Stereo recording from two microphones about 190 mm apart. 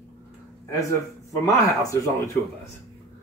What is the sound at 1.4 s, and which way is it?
Speech, 15° left (ahead or behind).